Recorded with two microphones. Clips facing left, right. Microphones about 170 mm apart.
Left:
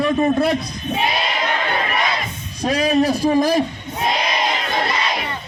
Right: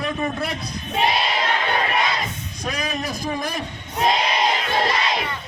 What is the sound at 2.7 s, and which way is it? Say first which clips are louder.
Speech: left 11 dB; 30° left (ahead or behind).